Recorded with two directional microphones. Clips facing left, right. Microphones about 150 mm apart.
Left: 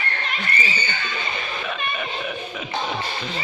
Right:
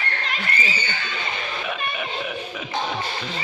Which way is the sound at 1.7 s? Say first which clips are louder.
Even; 5° right (ahead or behind).